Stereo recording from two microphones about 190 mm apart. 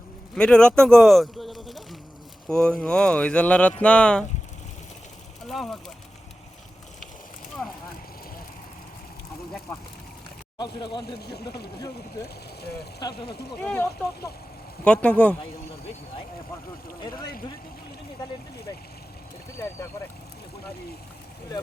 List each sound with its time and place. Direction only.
0.3 s speech: 5° left (ahead or behind)
5.5 s speech: centre (ahead or behind)
10.6 s speech: 25° left (ahead or behind)
11.0 s speech: 60° left (ahead or behind)
13.7 s speech: 10° left (ahead or behind)